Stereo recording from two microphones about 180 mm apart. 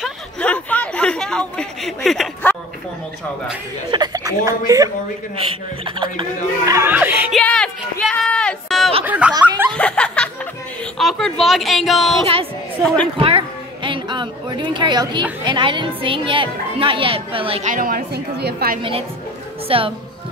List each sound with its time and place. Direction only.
0.0 s chatter: 5° left (ahead or behind)
3.9 s a sound: 20° right (ahead or behind)
4.5 s a woman's voice: 20° right (ahead or behind)
7.3 s a sound: 5° left (ahead or behind)
9.0 s speech: 10° right (ahead or behind)
9.8 s snicker: 5° left (ahead or behind)
11.0 s speech: centre (ahead or behind)
13.8 s a woman's voice: 25° right (ahead or behind); by 18.8 s 60° right (ahead or behind)
18.8 s a woman's voice: 30° right (ahead or behind)